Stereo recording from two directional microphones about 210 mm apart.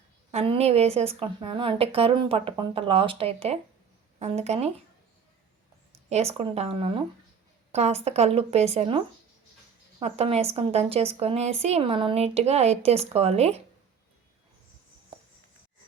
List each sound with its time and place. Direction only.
0.3 s a woman's voice: 30° right (ahead or behind)
6.1 s a woman's voice: 30° right (ahead or behind)